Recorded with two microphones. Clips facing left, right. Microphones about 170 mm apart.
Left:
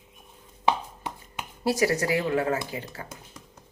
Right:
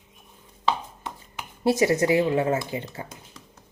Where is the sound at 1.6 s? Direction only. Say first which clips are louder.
Right 4 dB; 25° right (ahead or behind).